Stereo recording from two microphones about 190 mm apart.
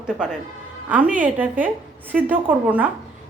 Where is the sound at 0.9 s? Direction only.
5° right (ahead or behind).